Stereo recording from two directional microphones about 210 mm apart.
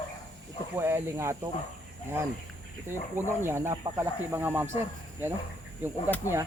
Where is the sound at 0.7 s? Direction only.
10° right (ahead or behind).